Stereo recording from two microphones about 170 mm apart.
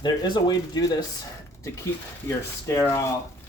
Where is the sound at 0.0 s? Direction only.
25° left (ahead or behind).